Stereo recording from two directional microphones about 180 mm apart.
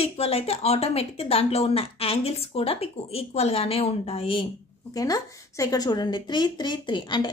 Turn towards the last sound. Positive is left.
turn(degrees=25)  # may be behind; listen again after turning